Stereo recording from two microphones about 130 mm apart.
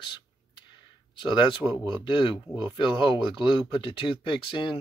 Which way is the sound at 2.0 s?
40° left (ahead or behind).